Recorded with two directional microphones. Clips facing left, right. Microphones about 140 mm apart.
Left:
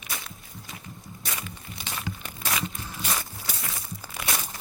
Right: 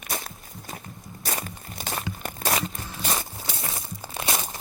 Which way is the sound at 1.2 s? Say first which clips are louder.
Right 5 dB; 45° right (ahead or behind).